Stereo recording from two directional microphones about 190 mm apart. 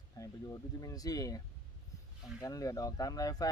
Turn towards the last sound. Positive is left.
turn(degrees=20)  # may be behind; listen again after turning